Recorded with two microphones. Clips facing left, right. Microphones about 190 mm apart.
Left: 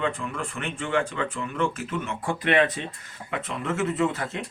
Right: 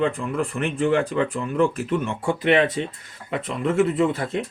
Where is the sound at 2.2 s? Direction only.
25° right (ahead or behind).